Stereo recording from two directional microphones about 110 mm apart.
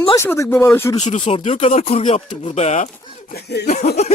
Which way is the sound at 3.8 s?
85° left.